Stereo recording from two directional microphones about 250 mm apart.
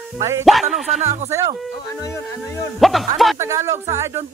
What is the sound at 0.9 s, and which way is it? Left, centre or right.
Speech, right.